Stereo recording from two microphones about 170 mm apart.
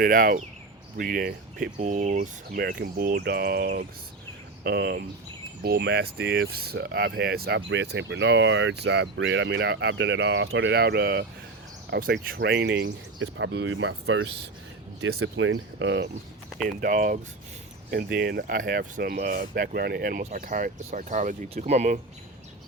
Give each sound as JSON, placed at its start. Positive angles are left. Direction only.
{"t": 0.0, "sound": "speech", "side_deg": -55}
{"t": 1.8, "sound": "speech", "side_deg": -45}
{"t": 2.6, "sound": "speech", "side_deg": -65}
{"t": 15.1, "sound": "speech", "side_deg": -85}
{"t": 16.6, "sound": "speech", "side_deg": -55}
{"t": 17.9, "sound": "speech", "side_deg": -70}